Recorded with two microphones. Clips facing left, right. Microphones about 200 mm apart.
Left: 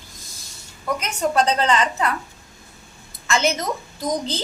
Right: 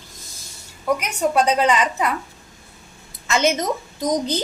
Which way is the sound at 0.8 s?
10° right (ahead or behind).